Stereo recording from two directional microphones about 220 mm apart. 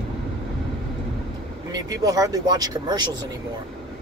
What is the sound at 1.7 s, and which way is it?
Speech, 15° right (ahead or behind).